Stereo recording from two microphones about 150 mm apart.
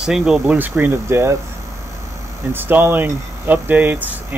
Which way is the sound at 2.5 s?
15° right (ahead or behind).